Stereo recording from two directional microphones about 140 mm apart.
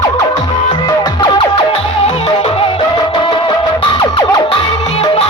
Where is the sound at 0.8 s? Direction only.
35° left (ahead or behind).